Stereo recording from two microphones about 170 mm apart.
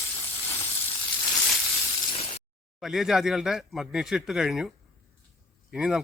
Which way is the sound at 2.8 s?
Centre (ahead or behind).